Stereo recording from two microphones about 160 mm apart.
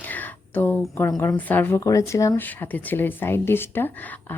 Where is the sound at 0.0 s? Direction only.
10° left (ahead or behind).